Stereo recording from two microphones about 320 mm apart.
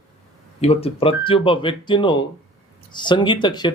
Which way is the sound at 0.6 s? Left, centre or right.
Centre.